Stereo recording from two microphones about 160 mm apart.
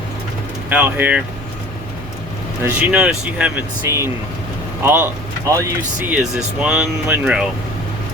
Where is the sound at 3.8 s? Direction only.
15° right (ahead or behind).